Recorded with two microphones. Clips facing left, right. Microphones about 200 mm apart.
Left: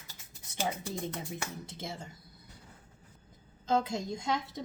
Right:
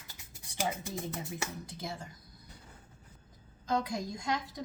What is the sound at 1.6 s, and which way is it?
Speech, 25° left (ahead or behind).